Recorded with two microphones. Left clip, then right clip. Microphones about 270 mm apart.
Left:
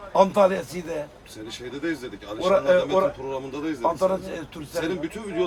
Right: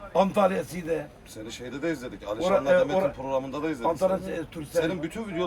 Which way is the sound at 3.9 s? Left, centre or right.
Centre.